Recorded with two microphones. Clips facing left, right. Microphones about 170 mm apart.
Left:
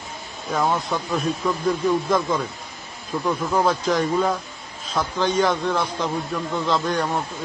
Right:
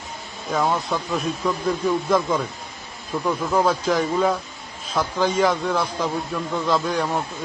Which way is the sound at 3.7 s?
5° right (ahead or behind).